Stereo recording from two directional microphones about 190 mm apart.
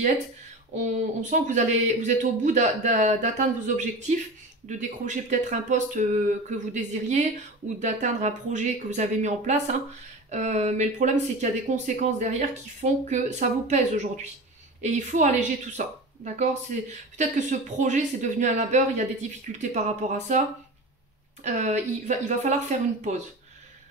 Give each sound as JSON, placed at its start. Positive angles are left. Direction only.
{"t": 0.7, "sound": "speech", "side_deg": -40}
{"t": 16.9, "sound": "speech", "side_deg": -40}